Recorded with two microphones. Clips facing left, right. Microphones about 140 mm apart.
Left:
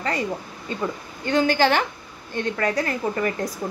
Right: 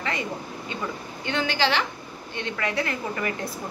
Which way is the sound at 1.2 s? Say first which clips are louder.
Left 6 dB; 40° left (ahead or behind).